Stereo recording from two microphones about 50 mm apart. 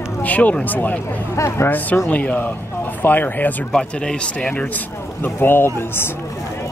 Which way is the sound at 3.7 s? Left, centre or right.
Centre.